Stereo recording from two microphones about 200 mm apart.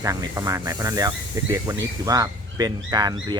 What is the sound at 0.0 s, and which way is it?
Speech, 15° right (ahead or behind).